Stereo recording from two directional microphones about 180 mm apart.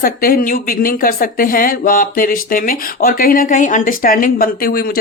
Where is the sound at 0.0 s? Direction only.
55° left (ahead or behind).